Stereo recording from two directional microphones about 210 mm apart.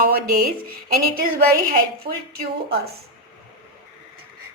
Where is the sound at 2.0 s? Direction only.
25° right (ahead or behind).